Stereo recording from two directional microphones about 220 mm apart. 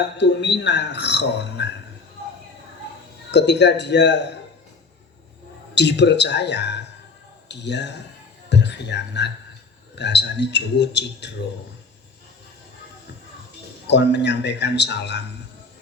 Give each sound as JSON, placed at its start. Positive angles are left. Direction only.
{"t": 0.2, "sound": "speech", "side_deg": 50}
{"t": 3.3, "sound": "speech", "side_deg": 50}
{"t": 5.7, "sound": "speech", "side_deg": 50}
{"t": 13.8, "sound": "speech", "side_deg": 50}